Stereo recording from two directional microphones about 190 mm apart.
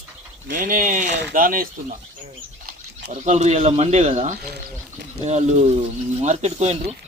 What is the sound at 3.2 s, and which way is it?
Speech, 35° right (ahead or behind).